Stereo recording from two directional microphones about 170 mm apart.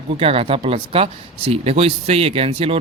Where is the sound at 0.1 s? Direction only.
35° right (ahead or behind).